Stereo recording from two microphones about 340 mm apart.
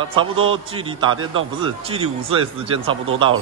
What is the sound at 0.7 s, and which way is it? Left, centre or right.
Speech, centre.